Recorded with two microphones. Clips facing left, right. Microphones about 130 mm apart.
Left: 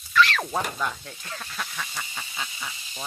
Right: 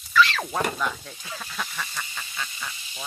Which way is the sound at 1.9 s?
15° left (ahead or behind).